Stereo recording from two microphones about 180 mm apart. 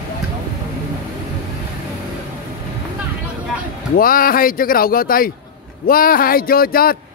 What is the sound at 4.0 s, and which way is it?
Speech, 55° left (ahead or behind).